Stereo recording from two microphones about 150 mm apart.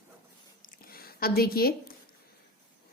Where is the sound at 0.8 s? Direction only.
80° left.